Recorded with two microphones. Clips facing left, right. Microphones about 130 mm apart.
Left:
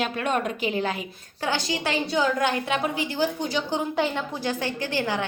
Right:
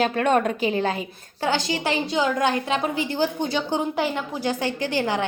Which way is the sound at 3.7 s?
15° right (ahead or behind).